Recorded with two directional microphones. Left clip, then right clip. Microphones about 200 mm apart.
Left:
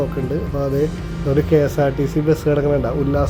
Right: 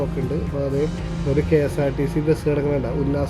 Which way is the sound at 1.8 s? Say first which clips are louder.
Left 4 dB; 5° left (ahead or behind).